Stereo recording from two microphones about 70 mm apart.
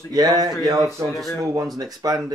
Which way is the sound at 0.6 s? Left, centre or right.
Right.